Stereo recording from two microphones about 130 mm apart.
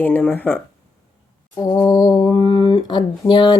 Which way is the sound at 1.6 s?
30° left (ahead or behind).